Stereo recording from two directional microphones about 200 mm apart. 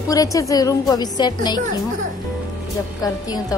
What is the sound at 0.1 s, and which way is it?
A woman's voice, 15° left (ahead or behind).